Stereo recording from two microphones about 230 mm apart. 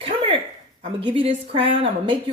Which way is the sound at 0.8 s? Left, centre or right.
Right.